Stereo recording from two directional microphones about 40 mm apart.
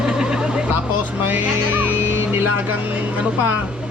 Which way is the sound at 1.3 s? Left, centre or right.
Right.